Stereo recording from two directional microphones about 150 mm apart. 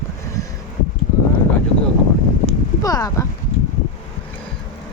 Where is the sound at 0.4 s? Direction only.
20° left (ahead or behind).